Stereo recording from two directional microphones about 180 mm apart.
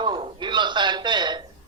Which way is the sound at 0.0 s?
25° right (ahead or behind).